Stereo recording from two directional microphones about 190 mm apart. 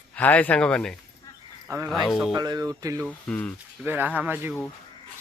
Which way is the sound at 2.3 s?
20° right (ahead or behind).